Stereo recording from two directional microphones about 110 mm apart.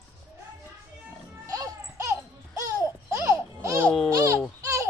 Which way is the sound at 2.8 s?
25° right (ahead or behind).